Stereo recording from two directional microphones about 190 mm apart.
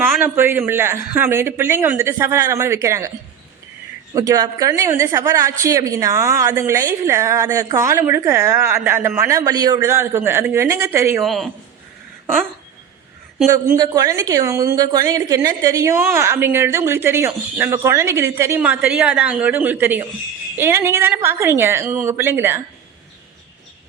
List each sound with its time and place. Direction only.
0.0 s a woman's voice: 10° right (ahead or behind)
4.1 s a woman's voice: 20° right (ahead or behind)
11.2 s a man's voice: centre (ahead or behind)
13.5 s a woman's voice: 20° right (ahead or behind)